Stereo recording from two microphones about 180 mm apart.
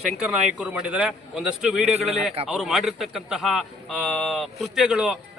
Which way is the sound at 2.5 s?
Centre (ahead or behind).